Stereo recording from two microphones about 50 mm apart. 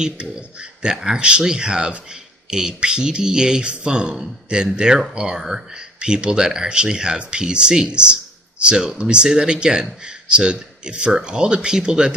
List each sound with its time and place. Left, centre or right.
0.0 s speech: centre